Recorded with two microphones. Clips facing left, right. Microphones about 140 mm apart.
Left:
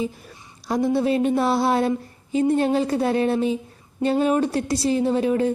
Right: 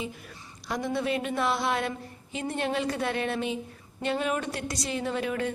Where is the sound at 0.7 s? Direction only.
35° left (ahead or behind).